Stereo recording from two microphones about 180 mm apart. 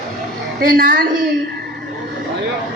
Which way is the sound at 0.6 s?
55° right (ahead or behind).